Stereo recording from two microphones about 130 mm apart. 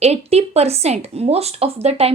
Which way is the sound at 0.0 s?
55° right (ahead or behind).